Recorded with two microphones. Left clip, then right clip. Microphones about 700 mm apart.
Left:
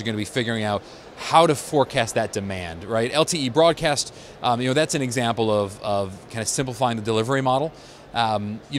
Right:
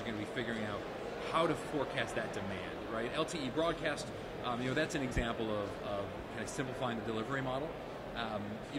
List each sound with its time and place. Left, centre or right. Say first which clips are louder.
0.0 s speech: left 13 dB; left